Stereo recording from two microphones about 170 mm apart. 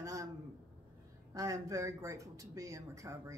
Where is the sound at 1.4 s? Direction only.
20° right (ahead or behind).